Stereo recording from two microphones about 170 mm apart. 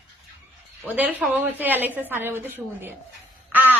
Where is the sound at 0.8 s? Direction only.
10° right (ahead or behind).